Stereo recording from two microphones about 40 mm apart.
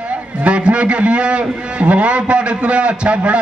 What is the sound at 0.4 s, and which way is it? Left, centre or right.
A man's voice, right.